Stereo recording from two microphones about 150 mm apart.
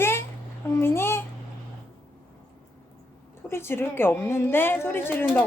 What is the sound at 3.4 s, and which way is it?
A child's voice, 15° left (ahead or behind).